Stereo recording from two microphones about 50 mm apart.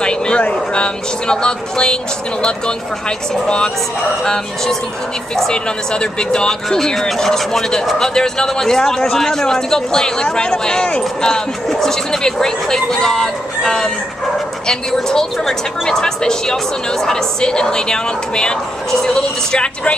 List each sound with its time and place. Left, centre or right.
0.4 s speech: left
3.4 s speech: centre